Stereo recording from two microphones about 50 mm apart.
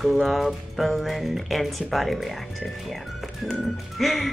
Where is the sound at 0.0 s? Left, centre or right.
Centre.